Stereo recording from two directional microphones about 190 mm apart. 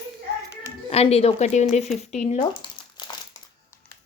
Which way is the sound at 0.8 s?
35° left (ahead or behind).